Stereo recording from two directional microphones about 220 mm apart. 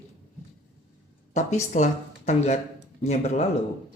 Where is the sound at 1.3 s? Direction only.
30° left (ahead or behind).